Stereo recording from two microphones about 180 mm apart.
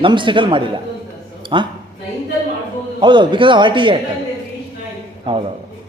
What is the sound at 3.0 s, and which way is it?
Speech, 25° right (ahead or behind).